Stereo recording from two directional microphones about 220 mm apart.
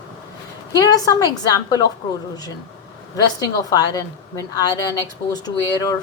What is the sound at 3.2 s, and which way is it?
A woman's voice, 15° left (ahead or behind).